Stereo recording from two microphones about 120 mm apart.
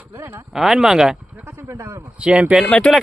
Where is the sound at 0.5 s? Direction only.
5° right (ahead or behind).